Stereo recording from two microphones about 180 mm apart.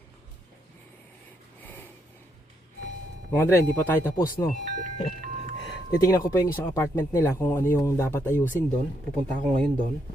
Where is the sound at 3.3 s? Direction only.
10° left (ahead or behind).